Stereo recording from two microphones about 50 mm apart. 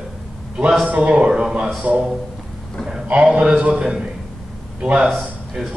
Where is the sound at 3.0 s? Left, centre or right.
Right.